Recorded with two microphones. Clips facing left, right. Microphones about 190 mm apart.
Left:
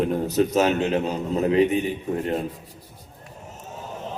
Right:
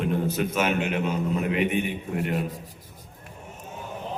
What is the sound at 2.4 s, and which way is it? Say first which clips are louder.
Speech: left 2 dB; 40° right (ahead or behind).